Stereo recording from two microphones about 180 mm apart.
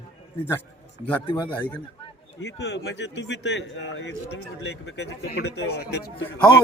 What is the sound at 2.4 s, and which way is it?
A man's voice, 75° left (ahead or behind).